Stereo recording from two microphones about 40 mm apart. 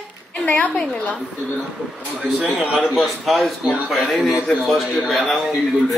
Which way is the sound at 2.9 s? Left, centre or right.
Centre.